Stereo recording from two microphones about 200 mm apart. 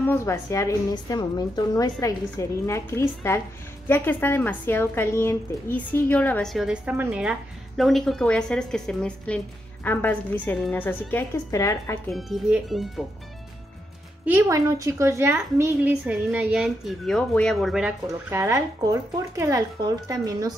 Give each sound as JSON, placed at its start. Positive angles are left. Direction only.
{"t": 0.0, "sound": "a woman's voice", "side_deg": 10}
{"t": 12.1, "sound": "a woman's voice", "side_deg": 0}
{"t": 14.2, "sound": "a woman's voice", "side_deg": -10}
{"t": 18.0, "sound": "a woman's voice", "side_deg": -15}